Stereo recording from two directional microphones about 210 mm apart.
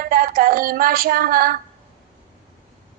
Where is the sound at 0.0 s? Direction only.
45° right (ahead or behind).